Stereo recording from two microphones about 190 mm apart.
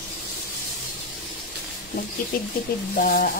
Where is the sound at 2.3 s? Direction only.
50° left (ahead or behind).